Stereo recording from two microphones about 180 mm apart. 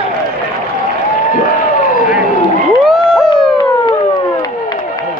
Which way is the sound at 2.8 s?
Centre (ahead or behind).